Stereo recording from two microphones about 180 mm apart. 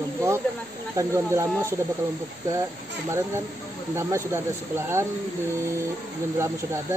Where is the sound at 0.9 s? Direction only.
15° right (ahead or behind).